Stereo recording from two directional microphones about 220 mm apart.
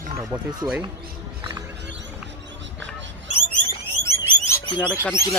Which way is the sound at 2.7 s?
55° right (ahead or behind).